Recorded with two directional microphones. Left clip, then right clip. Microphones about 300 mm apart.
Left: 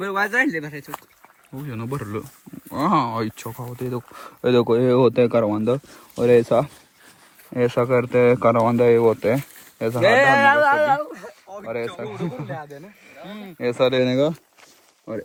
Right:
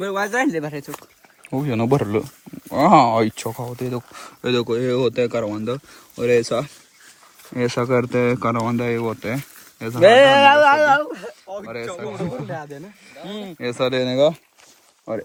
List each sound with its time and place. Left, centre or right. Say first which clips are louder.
0.0 s speech: even; centre
10.0 s speech: right 5 dB; right
10.8 s a sound: right 4 dB; right
11.6 s speech: left 6 dB; centre
12.5 s speech: right 2 dB; right
13.6 s speech: left 3 dB; centre